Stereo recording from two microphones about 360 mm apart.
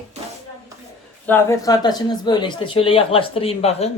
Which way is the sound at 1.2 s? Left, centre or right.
Centre.